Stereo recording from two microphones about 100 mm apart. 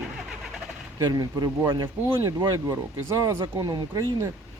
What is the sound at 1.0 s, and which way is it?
Speech, 40° right (ahead or behind).